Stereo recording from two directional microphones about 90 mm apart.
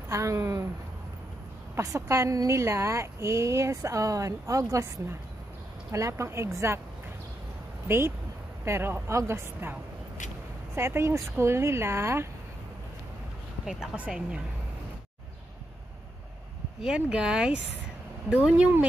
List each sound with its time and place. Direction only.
0.1 s a woman's voice: 35° right (ahead or behind)
1.8 s a woman's voice: 35° right (ahead or behind)
7.9 s speech: 25° right (ahead or behind)
13.7 s speech: 10° right (ahead or behind)
16.8 s speech: 10° right (ahead or behind)